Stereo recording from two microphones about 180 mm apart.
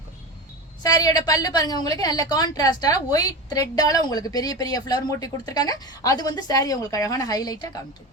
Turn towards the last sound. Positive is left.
turn(degrees=20)  # may be behind; listen again after turning